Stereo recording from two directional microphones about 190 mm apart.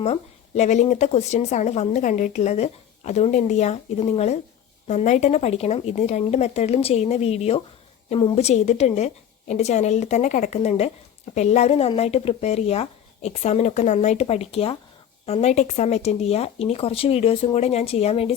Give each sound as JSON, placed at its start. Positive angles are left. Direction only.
{"t": 0.0, "sound": "a woman's voice", "side_deg": 35}